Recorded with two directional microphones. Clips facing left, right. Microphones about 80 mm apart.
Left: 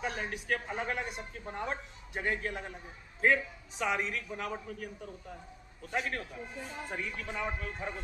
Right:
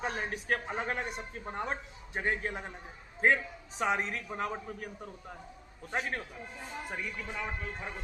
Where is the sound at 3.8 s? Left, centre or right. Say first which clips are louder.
Right 2 dB; right.